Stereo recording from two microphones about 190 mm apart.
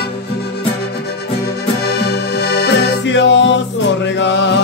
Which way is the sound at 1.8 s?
60° left (ahead or behind).